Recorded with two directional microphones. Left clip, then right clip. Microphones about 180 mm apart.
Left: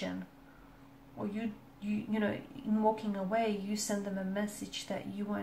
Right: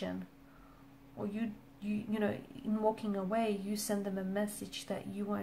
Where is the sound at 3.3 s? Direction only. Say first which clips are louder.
Left 2 dB; 45° right (ahead or behind).